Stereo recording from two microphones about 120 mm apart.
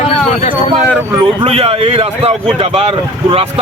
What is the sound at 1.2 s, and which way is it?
Speech, 50° right (ahead or behind).